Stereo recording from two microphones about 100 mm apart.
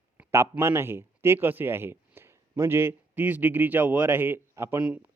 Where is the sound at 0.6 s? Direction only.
25° right (ahead or behind).